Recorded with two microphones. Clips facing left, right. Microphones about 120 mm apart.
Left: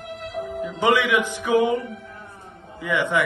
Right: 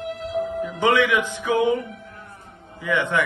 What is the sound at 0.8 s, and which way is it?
Speech, 15° left (ahead or behind).